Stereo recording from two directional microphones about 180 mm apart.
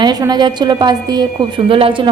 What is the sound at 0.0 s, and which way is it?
A woman's voice, 25° right (ahead or behind).